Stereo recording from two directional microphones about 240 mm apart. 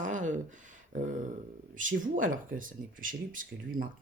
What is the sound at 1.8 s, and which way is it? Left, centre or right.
Speech, right.